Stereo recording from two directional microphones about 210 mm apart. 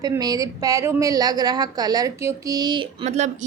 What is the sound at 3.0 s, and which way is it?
Speech, 30° right (ahead or behind).